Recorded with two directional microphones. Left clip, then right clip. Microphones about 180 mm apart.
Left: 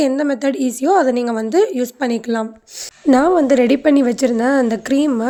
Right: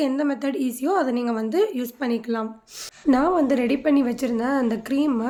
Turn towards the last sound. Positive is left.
turn(degrees=40)  # may be behind; listen again after turning